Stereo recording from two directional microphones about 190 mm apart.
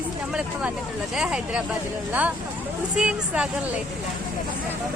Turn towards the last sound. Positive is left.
turn(degrees=-5)  # may be behind; listen again after turning